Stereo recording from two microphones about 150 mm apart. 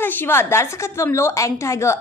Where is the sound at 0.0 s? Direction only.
15° left (ahead or behind).